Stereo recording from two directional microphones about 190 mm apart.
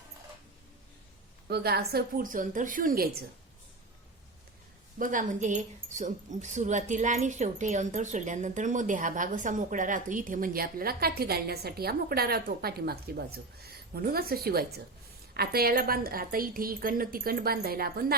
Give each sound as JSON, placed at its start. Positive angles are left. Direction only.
{"t": 1.5, "sound": "speech", "side_deg": -55}
{"t": 4.9, "sound": "speech", "side_deg": -45}